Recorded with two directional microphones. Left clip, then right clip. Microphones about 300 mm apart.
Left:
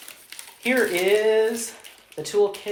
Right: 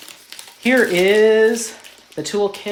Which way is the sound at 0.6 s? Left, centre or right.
Right.